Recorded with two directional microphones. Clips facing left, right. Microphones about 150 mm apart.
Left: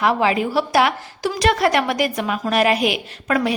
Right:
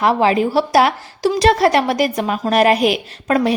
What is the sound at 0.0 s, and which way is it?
A woman's voice, 35° right (ahead or behind).